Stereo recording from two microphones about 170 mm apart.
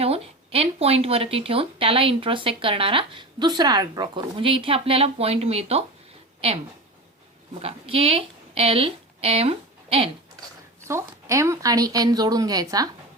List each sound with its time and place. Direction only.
0.0 s speech: 35° right (ahead or behind)
7.6 s a woman's voice: 35° right (ahead or behind)
10.8 s speech: 15° right (ahead or behind)